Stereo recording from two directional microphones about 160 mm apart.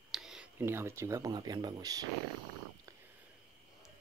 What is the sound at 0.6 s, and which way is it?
Speech, 15° right (ahead or behind).